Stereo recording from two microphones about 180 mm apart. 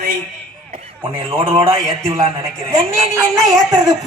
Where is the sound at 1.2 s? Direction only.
30° right (ahead or behind).